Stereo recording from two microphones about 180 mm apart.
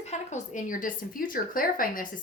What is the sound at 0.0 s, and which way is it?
Speech, 40° left (ahead or behind).